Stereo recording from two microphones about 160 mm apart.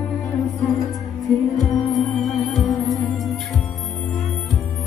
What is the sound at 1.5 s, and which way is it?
Music, centre (ahead or behind).